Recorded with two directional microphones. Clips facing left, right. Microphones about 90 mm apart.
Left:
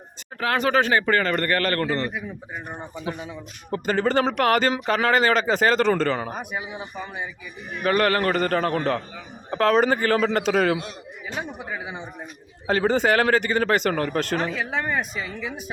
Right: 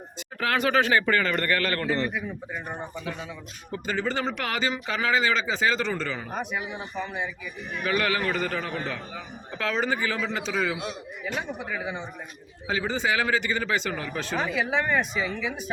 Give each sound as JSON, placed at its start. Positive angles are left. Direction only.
{"t": 0.3, "sound": "speech", "side_deg": 35}
{"t": 2.7, "sound": "speech", "side_deg": 15}
{"t": 3.2, "sound": "speech", "side_deg": 45}
{"t": 6.3, "sound": "speech", "side_deg": 5}
{"t": 7.9, "sound": "speech", "side_deg": 45}
{"t": 11.7, "sound": "speech", "side_deg": 15}
{"t": 12.6, "sound": "speech", "side_deg": 50}
{"t": 14.3, "sound": "speech", "side_deg": -5}